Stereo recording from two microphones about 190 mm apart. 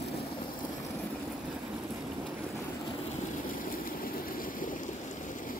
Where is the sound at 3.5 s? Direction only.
50° left (ahead or behind).